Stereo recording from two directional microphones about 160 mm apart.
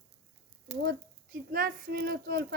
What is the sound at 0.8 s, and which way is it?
Speech, 75° right (ahead or behind).